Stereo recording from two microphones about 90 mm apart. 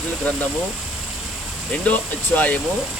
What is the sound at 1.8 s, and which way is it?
Speech, 15° left (ahead or behind).